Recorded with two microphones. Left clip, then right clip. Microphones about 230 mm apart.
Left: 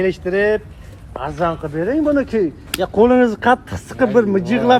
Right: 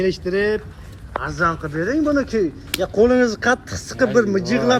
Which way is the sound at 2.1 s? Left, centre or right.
Centre.